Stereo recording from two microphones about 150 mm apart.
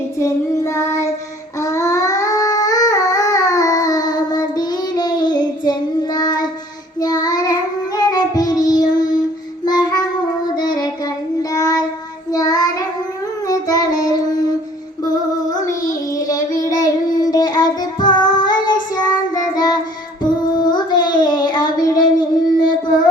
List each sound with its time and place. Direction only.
0.2 s child singing: 20° left (ahead or behind)
1.5 s a sound: 20° left (ahead or behind)
7.0 s child singing: 25° left (ahead or behind)
15.9 s child singing: 25° left (ahead or behind)